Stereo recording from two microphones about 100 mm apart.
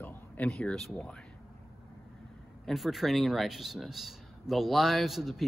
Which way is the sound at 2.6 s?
Centre (ahead or behind).